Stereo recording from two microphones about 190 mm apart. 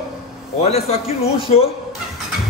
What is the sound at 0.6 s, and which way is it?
A man's voice, 30° left (ahead or behind).